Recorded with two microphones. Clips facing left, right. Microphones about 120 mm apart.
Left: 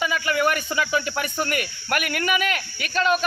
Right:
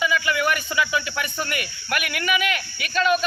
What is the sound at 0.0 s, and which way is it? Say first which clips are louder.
Speech: even; 40° left (ahead or behind).